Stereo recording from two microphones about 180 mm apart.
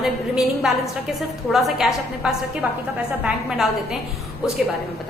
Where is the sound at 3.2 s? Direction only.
5° right (ahead or behind).